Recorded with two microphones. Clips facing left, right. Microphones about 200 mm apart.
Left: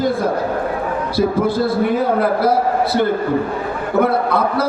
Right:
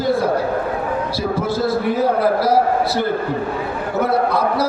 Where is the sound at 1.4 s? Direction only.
55° left (ahead or behind).